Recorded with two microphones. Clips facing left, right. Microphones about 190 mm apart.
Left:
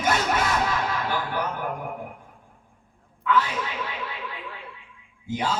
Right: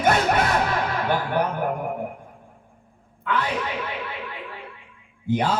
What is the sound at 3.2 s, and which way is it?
Speech, 60° right (ahead or behind).